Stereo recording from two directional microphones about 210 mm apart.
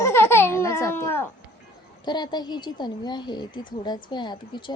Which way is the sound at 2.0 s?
20° left (ahead or behind).